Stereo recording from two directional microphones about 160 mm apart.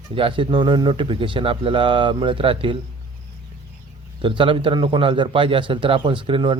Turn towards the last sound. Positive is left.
turn(degrees=-30)  # may be behind; listen again after turning